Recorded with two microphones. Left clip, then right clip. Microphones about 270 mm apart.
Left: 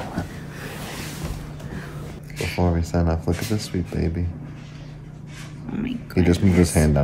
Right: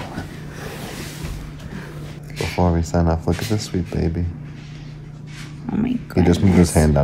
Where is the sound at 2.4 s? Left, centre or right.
Centre.